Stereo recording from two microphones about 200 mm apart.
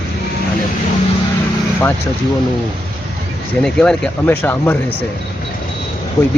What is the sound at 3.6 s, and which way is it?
Speech, 5° left (ahead or behind).